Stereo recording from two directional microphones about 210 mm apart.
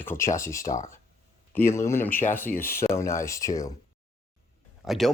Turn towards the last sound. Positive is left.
turn(degrees=0)  # may be behind; listen again after turning